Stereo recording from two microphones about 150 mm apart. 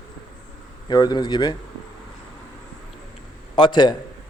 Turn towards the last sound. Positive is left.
turn(degrees=30)  # may be behind; listen again after turning